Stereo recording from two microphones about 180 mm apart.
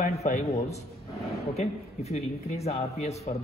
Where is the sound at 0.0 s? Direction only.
40° left (ahead or behind).